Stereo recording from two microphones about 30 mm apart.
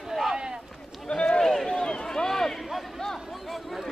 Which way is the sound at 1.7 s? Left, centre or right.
Left.